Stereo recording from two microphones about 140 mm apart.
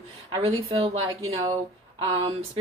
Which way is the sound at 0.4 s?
45° right (ahead or behind).